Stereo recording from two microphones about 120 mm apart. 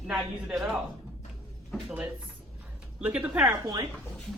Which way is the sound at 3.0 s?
10° right (ahead or behind).